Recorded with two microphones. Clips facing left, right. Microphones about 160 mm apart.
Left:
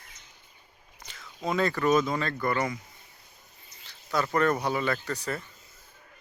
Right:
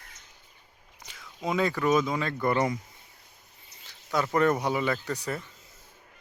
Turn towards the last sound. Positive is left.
turn(degrees=-15)  # may be behind; listen again after turning